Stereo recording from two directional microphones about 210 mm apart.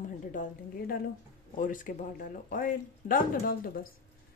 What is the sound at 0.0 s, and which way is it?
A woman's voice, 40° left (ahead or behind).